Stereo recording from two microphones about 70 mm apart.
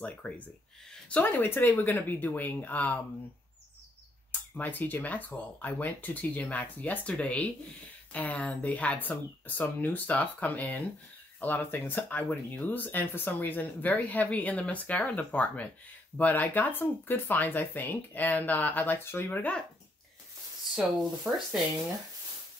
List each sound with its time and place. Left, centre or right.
0.0 s speech: left
4.3 s speech: left
20.7 s speech: centre